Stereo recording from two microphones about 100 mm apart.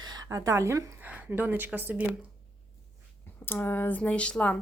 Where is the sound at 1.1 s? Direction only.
15° right (ahead or behind).